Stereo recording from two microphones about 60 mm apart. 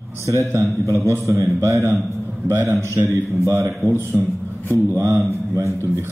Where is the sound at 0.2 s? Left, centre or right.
Right.